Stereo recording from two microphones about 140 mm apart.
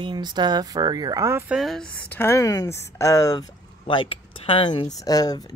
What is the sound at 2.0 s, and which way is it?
Speech, 15° left (ahead or behind).